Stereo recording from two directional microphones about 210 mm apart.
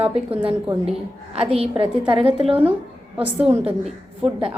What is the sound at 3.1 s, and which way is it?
Speech, 10° right (ahead or behind).